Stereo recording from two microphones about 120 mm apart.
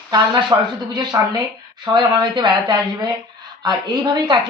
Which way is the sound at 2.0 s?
40° right (ahead or behind).